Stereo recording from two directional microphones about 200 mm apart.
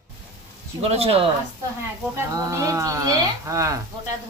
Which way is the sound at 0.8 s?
30° right (ahead or behind).